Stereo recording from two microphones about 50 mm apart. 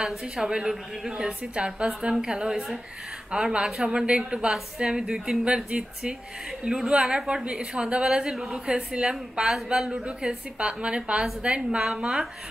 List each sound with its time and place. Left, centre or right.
0.0 s a woman's voice: centre